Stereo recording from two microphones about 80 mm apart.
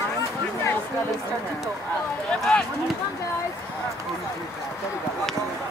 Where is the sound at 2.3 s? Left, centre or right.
Centre.